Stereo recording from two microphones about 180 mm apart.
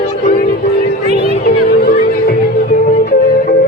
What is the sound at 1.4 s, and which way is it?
Music, 55° left (ahead or behind).